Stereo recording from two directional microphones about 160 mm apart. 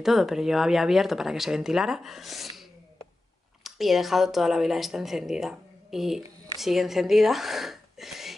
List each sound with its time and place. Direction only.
0.0 s speech: centre (ahead or behind)
3.6 s speech: centre (ahead or behind)